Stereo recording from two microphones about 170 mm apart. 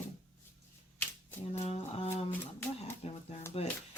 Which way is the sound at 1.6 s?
40° left (ahead or behind).